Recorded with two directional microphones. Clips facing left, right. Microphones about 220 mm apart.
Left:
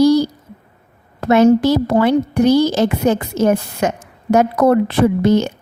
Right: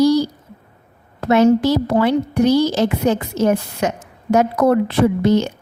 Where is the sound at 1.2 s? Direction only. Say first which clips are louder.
Left 2 dB; 50° left (ahead or behind).